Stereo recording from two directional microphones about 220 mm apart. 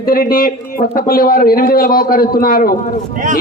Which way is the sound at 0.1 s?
40° left (ahead or behind).